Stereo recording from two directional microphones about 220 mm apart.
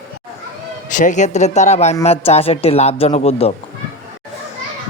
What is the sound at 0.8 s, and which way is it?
Speech, 35° left (ahead or behind).